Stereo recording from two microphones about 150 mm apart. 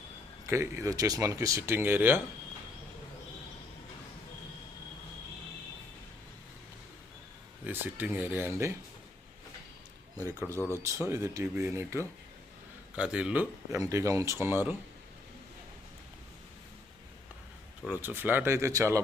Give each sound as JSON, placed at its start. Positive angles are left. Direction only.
{"t": 0.4, "sound": "speech", "side_deg": -20}
{"t": 7.7, "sound": "speech", "side_deg": -10}
{"t": 10.2, "sound": "speech", "side_deg": -20}
{"t": 13.0, "sound": "speech", "side_deg": -5}
{"t": 13.7, "sound": "speech", "side_deg": -20}
{"t": 17.8, "sound": "speech", "side_deg": -15}